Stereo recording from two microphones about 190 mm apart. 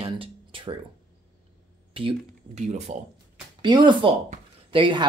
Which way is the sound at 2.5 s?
35° right (ahead or behind).